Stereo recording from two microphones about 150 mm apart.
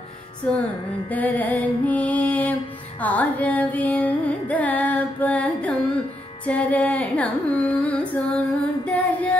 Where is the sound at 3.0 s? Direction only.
10° left (ahead or behind).